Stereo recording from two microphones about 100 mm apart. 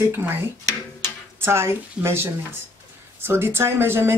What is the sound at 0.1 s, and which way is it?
Speech, 20° right (ahead or behind).